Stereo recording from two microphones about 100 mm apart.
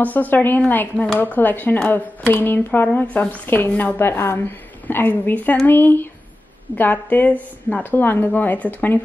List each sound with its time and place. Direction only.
0.0 s speech: 15° left (ahead or behind)